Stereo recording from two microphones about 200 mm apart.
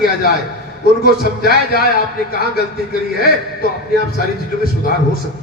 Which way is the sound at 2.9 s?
45° left (ahead or behind).